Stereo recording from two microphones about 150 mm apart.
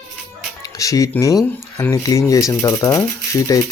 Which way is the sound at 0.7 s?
20° left (ahead or behind).